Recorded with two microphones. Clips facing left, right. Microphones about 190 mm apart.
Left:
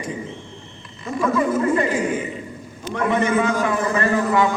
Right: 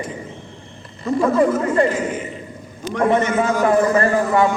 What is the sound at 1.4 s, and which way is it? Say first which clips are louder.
Speech: even; 50° right (ahead or behind).